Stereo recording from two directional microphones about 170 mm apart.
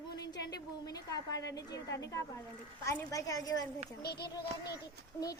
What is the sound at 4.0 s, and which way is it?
Speech, 70° left (ahead or behind).